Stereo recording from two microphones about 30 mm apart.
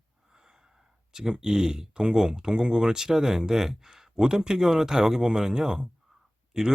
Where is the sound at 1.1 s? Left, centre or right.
Centre.